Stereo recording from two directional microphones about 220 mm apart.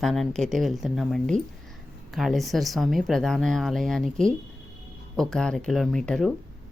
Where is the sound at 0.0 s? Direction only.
Centre (ahead or behind).